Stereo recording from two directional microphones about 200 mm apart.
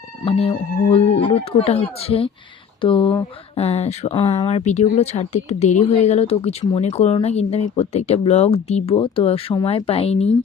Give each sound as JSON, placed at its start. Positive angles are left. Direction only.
{"t": 0.3, "sound": "speech", "side_deg": 30}